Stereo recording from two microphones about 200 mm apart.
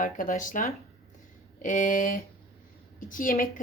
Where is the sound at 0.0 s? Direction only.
40° left (ahead or behind).